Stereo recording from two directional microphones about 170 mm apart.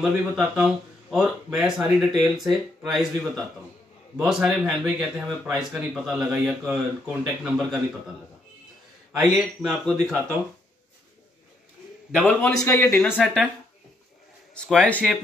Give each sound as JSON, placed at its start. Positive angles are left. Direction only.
{"t": 0.0, "sound": "speech", "side_deg": -5}
{"t": 9.1, "sound": "speech", "side_deg": -5}
{"t": 12.1, "sound": "speech", "side_deg": 5}
{"t": 12.9, "sound": "speech", "side_deg": 0}
{"t": 14.5, "sound": "speech", "side_deg": 5}